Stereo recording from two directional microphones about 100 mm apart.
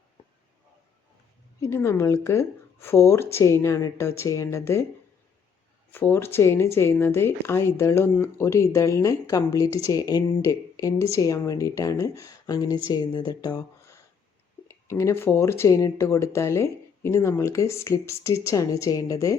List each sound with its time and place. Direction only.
1.6 s speech: 25° left (ahead or behind)
5.9 s speech: 20° left (ahead or behind); by 13.7 s 45° left (ahead or behind)
14.7 s speech: 30° left (ahead or behind)